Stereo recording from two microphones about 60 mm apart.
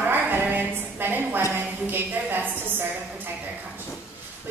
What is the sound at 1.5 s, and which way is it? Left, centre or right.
A woman's voice, right.